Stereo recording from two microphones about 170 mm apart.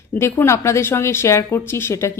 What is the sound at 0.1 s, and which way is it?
Speech, 15° left (ahead or behind).